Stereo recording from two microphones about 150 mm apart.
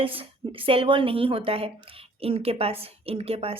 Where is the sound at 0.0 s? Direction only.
35° right (ahead or behind).